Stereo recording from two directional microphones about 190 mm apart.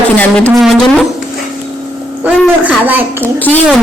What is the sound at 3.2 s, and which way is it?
Speech, 10° left (ahead or behind).